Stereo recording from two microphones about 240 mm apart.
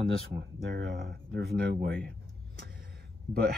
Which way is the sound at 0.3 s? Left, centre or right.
Right.